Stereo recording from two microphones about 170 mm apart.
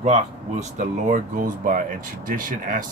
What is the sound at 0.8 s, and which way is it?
Speech, 50° right (ahead or behind).